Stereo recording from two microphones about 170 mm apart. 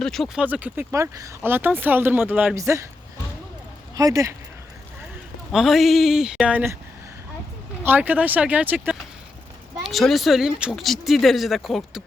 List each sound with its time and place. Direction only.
0.0 s speech: centre (ahead or behind)
0.4 s speech: 10° right (ahead or behind)
3.9 s speech: 20° right (ahead or behind)
5.5 s speech: centre (ahead or behind)
7.9 s speech: 10° right (ahead or behind)